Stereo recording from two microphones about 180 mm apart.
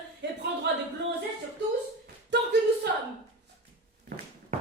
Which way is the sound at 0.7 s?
70° right (ahead or behind).